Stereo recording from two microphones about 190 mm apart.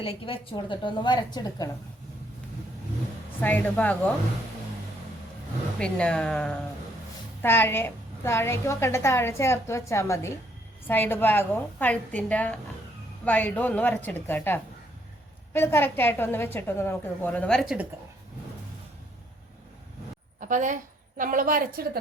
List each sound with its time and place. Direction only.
0.0 s a woman's voice: 25° left (ahead or behind)
3.4 s a woman's voice: 10° left (ahead or behind)
5.8 s a woman's voice: 5° left (ahead or behind)
20.4 s a woman's voice: 40° right (ahead or behind)